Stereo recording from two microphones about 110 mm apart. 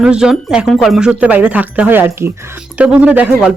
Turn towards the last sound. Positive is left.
turn(degrees=-15)  # may be behind; listen again after turning